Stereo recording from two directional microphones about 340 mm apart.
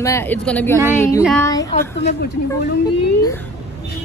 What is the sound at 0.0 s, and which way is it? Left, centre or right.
Speech, centre.